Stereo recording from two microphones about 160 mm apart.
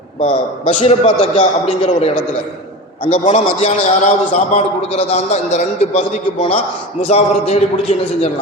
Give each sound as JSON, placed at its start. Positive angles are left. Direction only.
{"t": 0.2, "sound": "a man's voice", "side_deg": 40}
{"t": 3.6, "sound": "a man's voice", "side_deg": 45}